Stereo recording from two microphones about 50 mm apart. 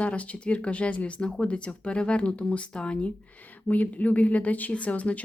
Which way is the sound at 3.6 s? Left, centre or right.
Left.